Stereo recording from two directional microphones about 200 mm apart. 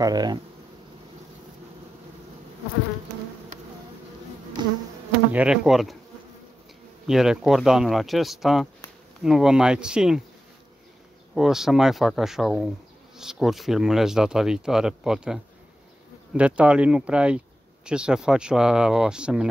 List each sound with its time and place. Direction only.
0.0 s speech: 20° right (ahead or behind)
4.6 s bee: 20° right (ahead or behind)
5.3 s speech: 5° right (ahead or behind)
7.1 s speech: centre (ahead or behind)
11.3 s speech: centre (ahead or behind)